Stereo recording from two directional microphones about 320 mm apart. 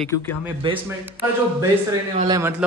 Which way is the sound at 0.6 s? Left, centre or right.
Centre.